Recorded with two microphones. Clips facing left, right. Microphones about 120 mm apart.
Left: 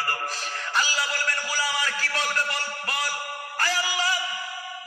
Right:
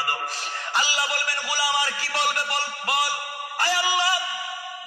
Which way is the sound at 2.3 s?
15° right (ahead or behind).